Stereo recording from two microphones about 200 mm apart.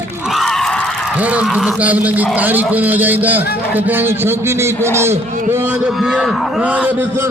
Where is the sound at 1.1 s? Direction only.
5° right (ahead or behind).